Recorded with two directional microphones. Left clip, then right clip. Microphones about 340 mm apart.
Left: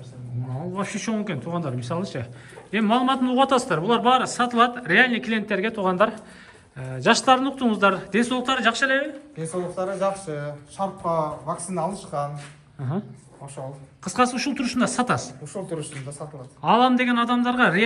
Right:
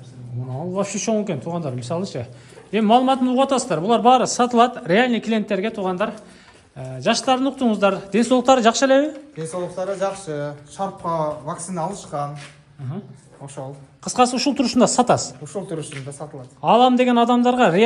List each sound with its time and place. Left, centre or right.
0.7 s a man's voice: centre
9.4 s speech: right
13.6 s speech: right
14.0 s a woman's voice: centre
15.4 s speech: right
16.6 s a man's voice: centre